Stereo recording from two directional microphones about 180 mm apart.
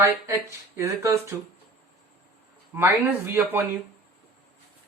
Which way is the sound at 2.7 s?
15° right (ahead or behind).